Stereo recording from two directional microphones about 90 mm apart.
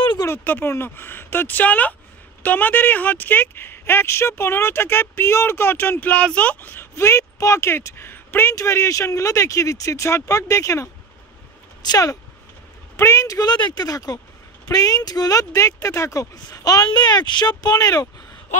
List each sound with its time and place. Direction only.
0.4 s speech: 20° left (ahead or behind); by 12.2 s 45° left (ahead or behind)
12.9 s speech: 35° left (ahead or behind)
13.5 s speech: 50° left (ahead or behind)